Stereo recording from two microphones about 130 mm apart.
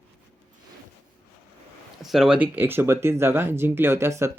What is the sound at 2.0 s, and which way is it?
Speech, 5° right (ahead or behind).